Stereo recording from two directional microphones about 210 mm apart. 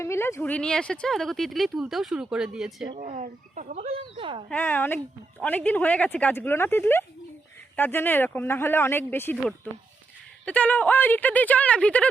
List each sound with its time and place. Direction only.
0.0 s speech: 15° left (ahead or behind)
3.0 s speech: 35° right (ahead or behind)
4.4 s speech: 10° left (ahead or behind)
10.4 s speech: 5° left (ahead or behind)